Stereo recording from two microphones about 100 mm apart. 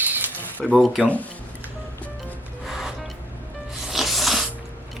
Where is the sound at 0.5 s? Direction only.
15° left (ahead or behind).